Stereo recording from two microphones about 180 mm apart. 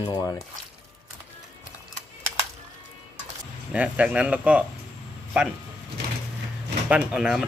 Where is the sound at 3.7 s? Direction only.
5° right (ahead or behind).